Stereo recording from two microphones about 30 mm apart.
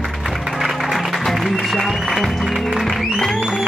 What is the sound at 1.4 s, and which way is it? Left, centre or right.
Music, centre.